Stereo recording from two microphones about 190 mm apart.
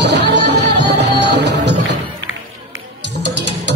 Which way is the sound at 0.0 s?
65° right (ahead or behind).